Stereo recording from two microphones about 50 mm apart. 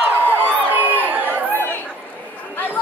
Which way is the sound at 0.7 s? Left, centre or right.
Right.